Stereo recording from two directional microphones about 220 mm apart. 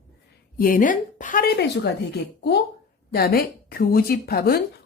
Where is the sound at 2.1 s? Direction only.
50° left (ahead or behind).